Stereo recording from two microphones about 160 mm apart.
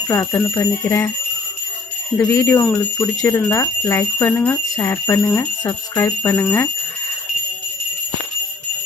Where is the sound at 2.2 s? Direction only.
15° left (ahead or behind).